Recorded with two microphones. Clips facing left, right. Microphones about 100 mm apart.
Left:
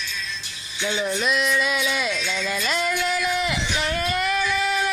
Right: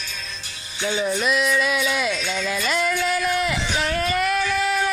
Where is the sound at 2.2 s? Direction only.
45° right (ahead or behind).